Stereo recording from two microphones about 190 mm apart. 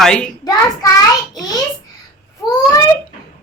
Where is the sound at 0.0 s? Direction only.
5° left (ahead or behind).